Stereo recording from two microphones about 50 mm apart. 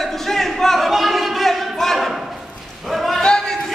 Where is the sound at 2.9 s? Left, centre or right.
Centre.